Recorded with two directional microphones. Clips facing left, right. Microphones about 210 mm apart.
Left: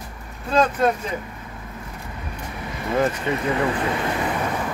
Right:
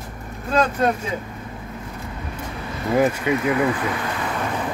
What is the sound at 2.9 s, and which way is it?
Speech, 10° right (ahead or behind).